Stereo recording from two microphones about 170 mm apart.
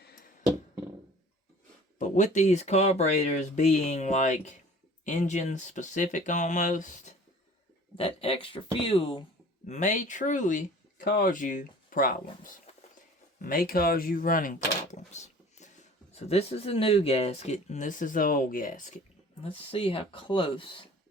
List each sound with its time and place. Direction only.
2.0 s speech: 45° left (ahead or behind)
7.9 s speech: 35° left (ahead or behind)
9.6 s speech: 45° left (ahead or behind)
15.1 s speech: 45° left (ahead or behind)
19.4 s speech: 35° left (ahead or behind)